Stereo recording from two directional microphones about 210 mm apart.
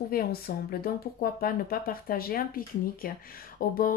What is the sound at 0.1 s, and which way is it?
Speech, 45° left (ahead or behind).